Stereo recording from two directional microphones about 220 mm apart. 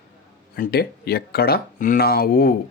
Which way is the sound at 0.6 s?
45° left (ahead or behind).